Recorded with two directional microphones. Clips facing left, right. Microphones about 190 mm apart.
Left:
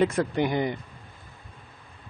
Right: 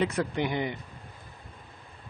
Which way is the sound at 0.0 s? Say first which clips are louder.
Left 4 dB; 45° left (ahead or behind).